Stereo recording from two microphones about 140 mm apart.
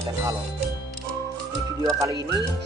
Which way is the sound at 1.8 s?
25° right (ahead or behind).